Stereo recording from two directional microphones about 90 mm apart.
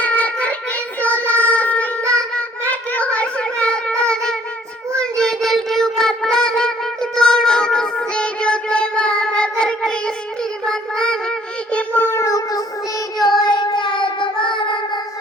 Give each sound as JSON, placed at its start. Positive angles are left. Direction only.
{"t": 0.0, "sound": "music", "side_deg": 15}
{"t": 1.0, "sound": "child singing", "side_deg": 20}
{"t": 2.3, "sound": "a sound", "side_deg": 15}
{"t": 4.1, "sound": "music", "side_deg": 5}
{"t": 4.9, "sound": "a sound", "side_deg": 5}
{"t": 10.7, "sound": "child singing", "side_deg": 10}
{"t": 12.2, "sound": "child singing", "side_deg": 40}